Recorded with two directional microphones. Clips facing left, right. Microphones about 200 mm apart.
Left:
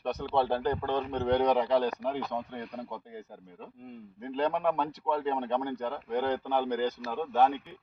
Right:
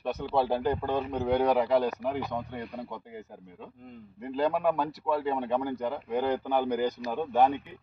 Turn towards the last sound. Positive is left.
turn(degrees=-15)  # may be behind; listen again after turning